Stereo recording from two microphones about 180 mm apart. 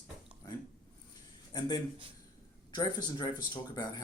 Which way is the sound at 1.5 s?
20° left (ahead or behind).